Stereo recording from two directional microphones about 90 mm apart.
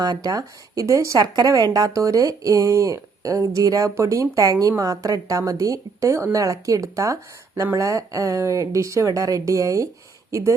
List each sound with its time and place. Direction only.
0.0 s speech: 45° right (ahead or behind)
1.2 s speech: 45° right (ahead or behind)